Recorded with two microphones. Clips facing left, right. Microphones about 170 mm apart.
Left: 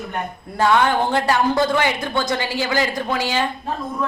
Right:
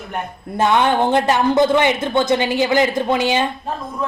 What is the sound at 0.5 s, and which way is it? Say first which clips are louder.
A woman's voice: right 1 dB; 20° right (ahead or behind).